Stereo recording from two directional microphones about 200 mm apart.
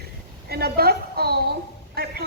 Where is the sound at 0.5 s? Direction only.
50° right (ahead or behind).